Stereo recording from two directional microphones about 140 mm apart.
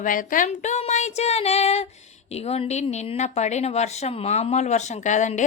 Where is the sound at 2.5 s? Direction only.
50° left (ahead or behind).